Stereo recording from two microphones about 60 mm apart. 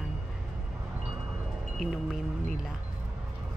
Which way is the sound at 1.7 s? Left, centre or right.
Centre.